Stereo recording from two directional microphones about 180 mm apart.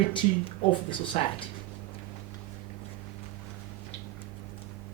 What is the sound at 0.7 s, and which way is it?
Speech, 30° left (ahead or behind).